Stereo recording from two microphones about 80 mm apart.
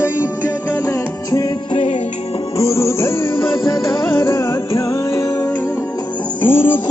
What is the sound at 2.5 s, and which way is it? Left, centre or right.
Music, left.